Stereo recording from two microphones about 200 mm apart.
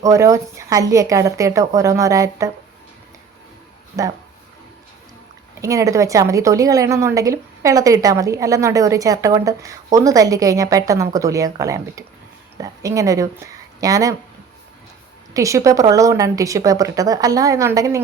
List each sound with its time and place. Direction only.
0.0 s a woman's voice: 15° right (ahead or behind)
4.0 s a woman's voice: 15° right (ahead or behind)
5.5 s a woman's voice: 15° right (ahead or behind)
15.3 s a woman's voice: 15° right (ahead or behind)